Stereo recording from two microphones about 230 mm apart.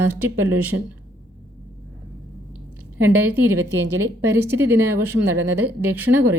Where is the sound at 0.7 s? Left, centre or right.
Right.